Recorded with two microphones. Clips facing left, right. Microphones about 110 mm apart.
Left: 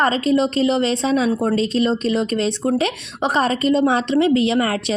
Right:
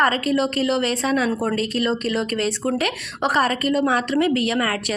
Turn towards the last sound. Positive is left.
turn(degrees=25)  # may be behind; listen again after turning